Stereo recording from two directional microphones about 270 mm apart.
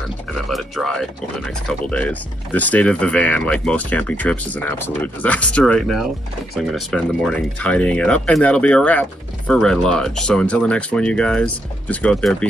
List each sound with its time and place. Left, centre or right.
0.5 s speech: centre